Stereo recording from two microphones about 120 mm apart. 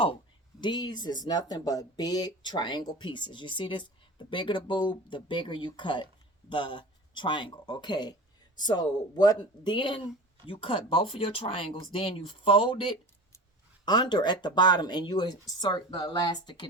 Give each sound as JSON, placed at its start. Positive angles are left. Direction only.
{"t": 0.6, "sound": "speech", "side_deg": 40}